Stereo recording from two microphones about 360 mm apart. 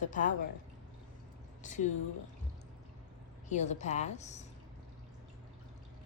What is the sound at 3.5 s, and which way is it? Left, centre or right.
Speech, centre.